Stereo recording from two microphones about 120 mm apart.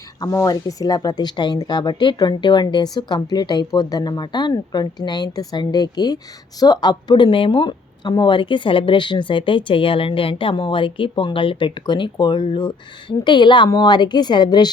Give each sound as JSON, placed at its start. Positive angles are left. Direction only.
{"t": 0.2, "sound": "speech", "side_deg": 30}